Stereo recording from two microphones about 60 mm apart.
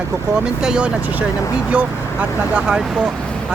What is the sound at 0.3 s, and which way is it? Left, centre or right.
Speech, centre.